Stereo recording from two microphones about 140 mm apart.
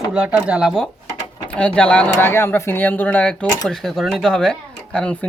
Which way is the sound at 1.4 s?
10° left (ahead or behind).